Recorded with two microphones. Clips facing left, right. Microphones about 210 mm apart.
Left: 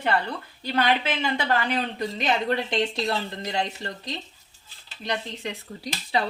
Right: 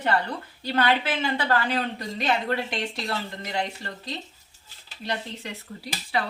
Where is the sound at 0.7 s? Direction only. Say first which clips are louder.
Even; 15° left (ahead or behind).